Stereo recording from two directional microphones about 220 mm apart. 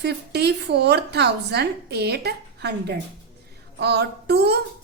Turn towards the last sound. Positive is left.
turn(degrees=-50)  # may be behind; listen again after turning